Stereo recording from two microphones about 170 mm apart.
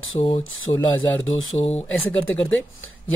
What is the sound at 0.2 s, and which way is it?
Speech, 35° left (ahead or behind).